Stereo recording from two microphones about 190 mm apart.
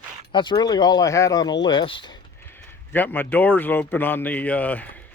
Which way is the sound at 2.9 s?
10° left (ahead or behind).